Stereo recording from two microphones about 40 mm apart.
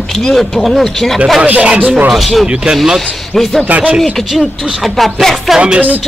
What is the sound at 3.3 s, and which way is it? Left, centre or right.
Speech, centre.